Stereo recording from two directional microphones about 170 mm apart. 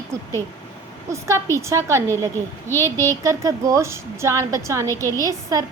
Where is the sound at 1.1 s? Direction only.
15° right (ahead or behind).